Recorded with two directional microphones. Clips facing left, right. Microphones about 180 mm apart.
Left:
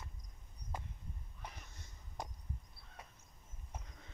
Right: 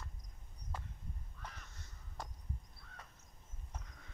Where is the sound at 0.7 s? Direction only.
15° left (ahead or behind).